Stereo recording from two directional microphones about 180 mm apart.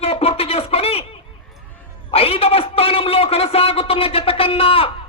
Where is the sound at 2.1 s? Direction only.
30° left (ahead or behind).